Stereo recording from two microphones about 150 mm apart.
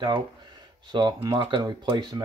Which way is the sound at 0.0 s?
30° right (ahead or behind).